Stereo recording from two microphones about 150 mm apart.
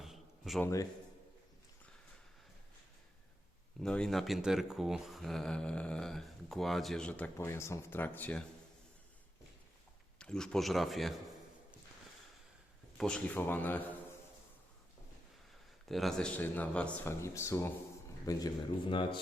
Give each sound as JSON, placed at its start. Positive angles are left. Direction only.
{"t": 0.0, "sound": "a sound", "side_deg": 0}
{"t": 0.6, "sound": "speech", "side_deg": 20}
{"t": 3.8, "sound": "speech", "side_deg": 5}
{"t": 10.2, "sound": "speech", "side_deg": 5}
{"t": 13.0, "sound": "speech", "side_deg": 5}
{"t": 15.9, "sound": "speech", "side_deg": 0}
{"t": 17.2, "sound": "speech", "side_deg": 20}